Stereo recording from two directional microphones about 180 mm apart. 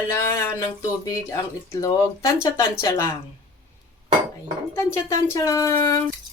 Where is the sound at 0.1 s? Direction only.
15° left (ahead or behind).